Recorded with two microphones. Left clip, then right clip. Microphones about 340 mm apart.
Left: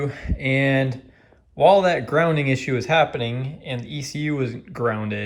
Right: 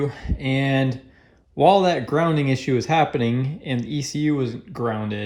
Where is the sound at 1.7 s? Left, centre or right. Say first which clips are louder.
Left 1 dB; centre.